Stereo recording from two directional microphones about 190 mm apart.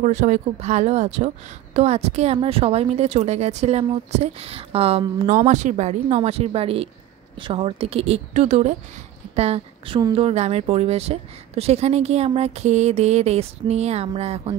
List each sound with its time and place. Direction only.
0.0 s a woman's voice: 40° right (ahead or behind)